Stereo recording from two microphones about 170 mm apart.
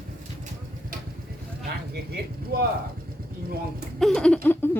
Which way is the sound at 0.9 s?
55° right (ahead or behind).